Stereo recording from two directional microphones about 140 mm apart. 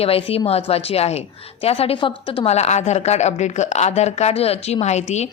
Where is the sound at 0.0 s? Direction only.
45° left (ahead or behind).